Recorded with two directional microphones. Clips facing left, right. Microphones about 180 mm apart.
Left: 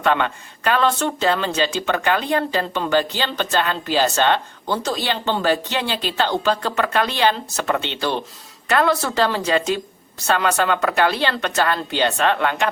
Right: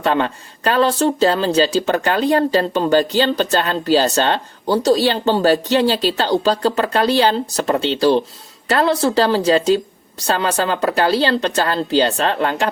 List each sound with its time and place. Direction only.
0.0 s speech: 35° right (ahead or behind)